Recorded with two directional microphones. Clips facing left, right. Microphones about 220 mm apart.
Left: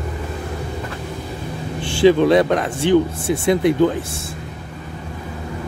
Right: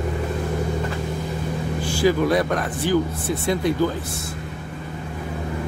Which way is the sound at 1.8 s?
30° left (ahead or behind).